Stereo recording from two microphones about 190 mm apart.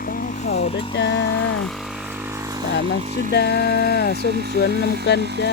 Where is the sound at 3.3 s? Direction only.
60° left (ahead or behind).